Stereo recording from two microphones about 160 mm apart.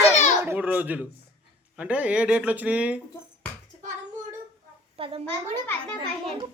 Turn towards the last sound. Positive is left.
turn(degrees=-30)  # may be behind; listen again after turning